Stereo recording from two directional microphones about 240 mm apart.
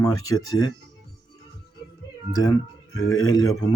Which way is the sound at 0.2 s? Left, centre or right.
Left.